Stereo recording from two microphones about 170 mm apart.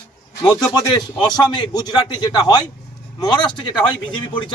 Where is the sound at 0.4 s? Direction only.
25° left (ahead or behind).